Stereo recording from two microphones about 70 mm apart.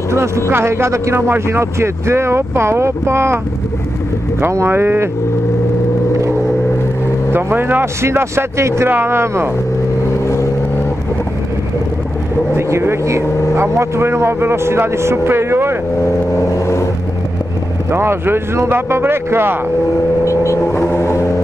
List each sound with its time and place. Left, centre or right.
0.5 s speech: right
4.5 s speech: right
7.3 s speech: right
10.2 s vehicle: left
12.5 s speech: right
16.5 s vehicle: left
17.9 s speech: right
20.2 s vehicle: left